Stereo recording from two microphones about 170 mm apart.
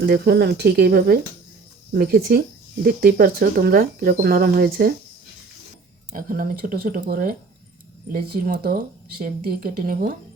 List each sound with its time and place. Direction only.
0.0 s speech: 70° right (ahead or behind)
6.1 s speech: 55° right (ahead or behind)